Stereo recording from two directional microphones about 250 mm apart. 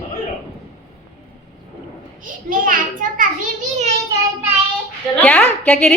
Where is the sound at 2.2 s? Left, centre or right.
Right.